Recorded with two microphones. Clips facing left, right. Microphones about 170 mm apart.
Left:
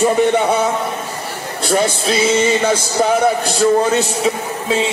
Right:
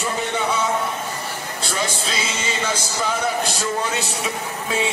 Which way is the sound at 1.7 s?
60° left (ahead or behind).